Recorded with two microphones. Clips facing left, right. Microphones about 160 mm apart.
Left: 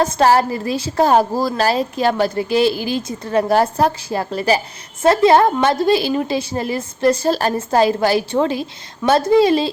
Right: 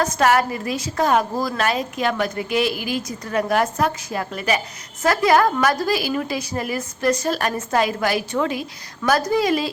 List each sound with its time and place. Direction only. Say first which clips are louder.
0.0 s a woman's voice: left 4 dB; 30° left (ahead or behind)